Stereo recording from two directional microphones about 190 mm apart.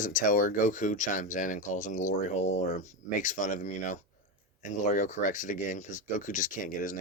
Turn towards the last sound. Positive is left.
turn(degrees=45)  # may be behind; listen again after turning